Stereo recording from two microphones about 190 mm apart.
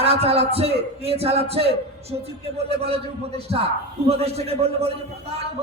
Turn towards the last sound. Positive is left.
turn(degrees=-35)  # may be behind; listen again after turning